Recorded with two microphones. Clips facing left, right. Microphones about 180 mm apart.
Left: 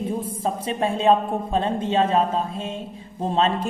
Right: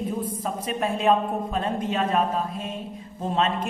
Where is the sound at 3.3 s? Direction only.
30° left (ahead or behind).